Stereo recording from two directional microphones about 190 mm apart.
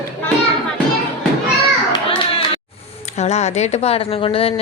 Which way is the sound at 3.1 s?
35° left (ahead or behind).